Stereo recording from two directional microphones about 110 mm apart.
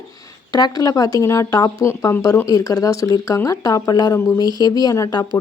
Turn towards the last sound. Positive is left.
turn(degrees=30)  # may be behind; listen again after turning